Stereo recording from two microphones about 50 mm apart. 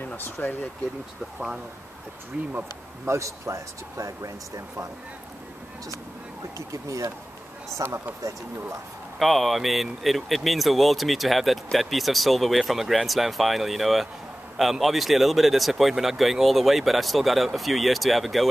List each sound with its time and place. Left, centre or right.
0.2 s speech: left
3.1 s speech: right
6.7 s speech: right
9.2 s speech: centre